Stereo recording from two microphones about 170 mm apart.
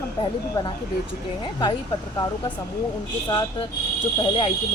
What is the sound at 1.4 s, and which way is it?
Speech, 25° left (ahead or behind).